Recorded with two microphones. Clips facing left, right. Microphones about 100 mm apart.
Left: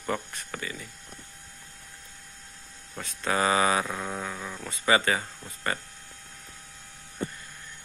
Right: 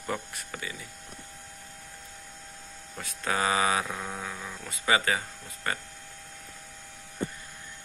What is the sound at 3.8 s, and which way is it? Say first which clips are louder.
Mantra: left 3 dB; 10° left (ahead or behind).